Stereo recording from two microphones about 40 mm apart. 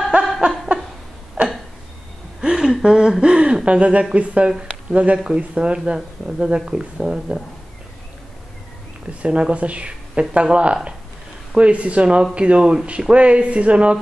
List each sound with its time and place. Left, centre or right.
0.1 s a sound: right
2.4 s speech: centre
9.2 s speech: right